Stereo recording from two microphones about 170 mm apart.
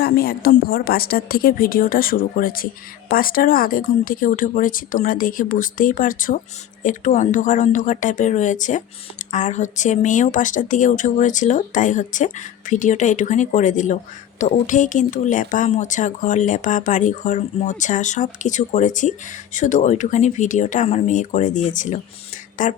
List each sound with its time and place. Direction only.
0.0 s speech: 60° left (ahead or behind)